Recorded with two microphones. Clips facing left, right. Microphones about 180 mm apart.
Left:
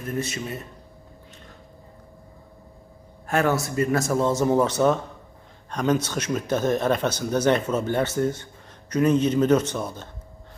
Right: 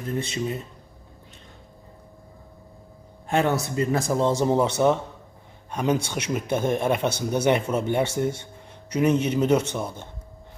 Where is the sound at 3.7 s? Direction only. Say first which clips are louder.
Left 1 dB; 25° right (ahead or behind).